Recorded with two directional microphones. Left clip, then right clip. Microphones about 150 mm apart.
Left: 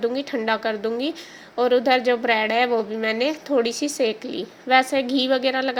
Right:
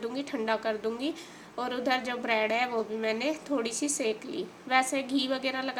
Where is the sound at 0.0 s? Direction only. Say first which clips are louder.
Left 9 dB; 30° left (ahead or behind).